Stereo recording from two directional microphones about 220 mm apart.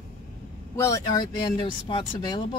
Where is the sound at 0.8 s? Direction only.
15° left (ahead or behind).